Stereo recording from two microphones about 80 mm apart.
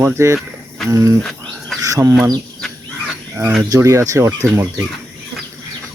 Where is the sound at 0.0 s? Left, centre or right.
Right.